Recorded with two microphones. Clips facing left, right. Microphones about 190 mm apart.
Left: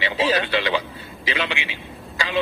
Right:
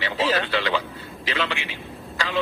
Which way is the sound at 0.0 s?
15° left (ahead or behind).